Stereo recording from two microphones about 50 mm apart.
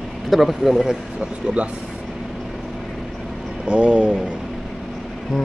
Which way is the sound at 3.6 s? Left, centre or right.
Right.